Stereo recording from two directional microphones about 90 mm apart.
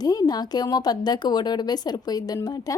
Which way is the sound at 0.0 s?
45° left (ahead or behind).